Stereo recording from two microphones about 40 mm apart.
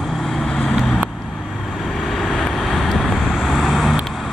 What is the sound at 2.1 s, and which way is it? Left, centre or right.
Vehicle, centre.